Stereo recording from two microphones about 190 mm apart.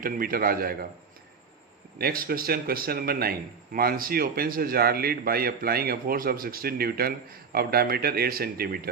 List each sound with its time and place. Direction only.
0.0 s a man's voice: 50° right (ahead or behind)
2.0 s a man's voice: 50° right (ahead or behind)